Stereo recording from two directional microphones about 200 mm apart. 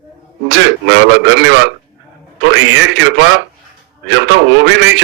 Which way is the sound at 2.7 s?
65° right (ahead or behind).